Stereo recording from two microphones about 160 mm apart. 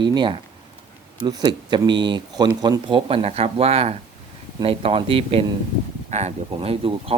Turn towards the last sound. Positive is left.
turn(degrees=-35)  # may be behind; listen again after turning